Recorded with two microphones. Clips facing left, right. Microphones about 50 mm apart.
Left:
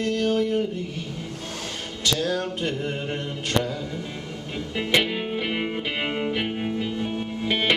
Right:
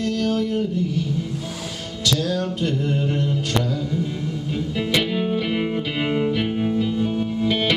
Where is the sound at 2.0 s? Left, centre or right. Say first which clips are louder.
Right 2 dB; left.